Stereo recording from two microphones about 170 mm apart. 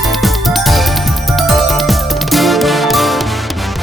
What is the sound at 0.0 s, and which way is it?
Music, centre (ahead or behind).